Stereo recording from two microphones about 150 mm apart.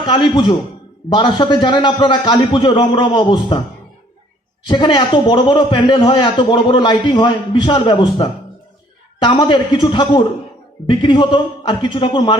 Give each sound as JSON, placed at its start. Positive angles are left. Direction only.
{"t": 0.0, "sound": "a man's voice", "side_deg": 35}
{"t": 4.6, "sound": "a man's voice", "side_deg": 30}